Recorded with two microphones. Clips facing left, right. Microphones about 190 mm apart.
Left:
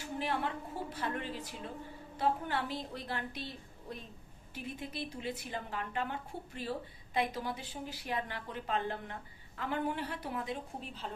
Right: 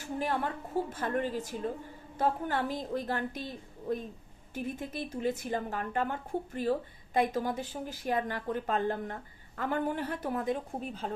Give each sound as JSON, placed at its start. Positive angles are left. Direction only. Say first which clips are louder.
{"t": 0.2, "sound": "a woman's voice", "louder": "right 3 dB", "side_deg": -45}
{"t": 4.5, "sound": "a woman's voice", "louder": "right 6 dB", "side_deg": -45}